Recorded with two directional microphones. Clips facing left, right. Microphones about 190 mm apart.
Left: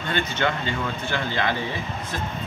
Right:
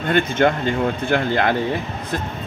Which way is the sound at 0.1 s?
50° right (ahead or behind).